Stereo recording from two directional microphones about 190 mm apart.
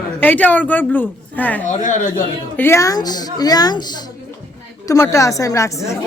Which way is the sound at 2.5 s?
15° left (ahead or behind).